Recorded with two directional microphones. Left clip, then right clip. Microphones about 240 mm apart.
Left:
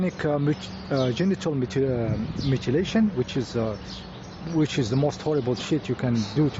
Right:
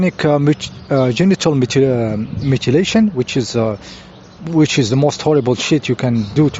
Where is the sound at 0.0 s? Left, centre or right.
Right.